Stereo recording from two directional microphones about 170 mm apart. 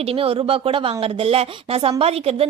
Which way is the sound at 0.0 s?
35° right (ahead or behind).